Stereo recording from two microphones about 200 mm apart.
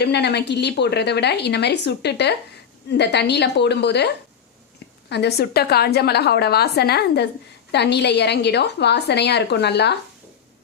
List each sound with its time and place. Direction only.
0.0 s a woman's voice: 55° left (ahead or behind)